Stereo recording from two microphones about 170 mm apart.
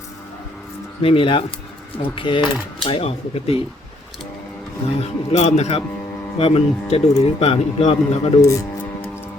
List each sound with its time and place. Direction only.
1.0 s a man's voice: 30° left (ahead or behind)
4.9 s a man's voice: 40° left (ahead or behind)
8.4 s speech: 20° left (ahead or behind)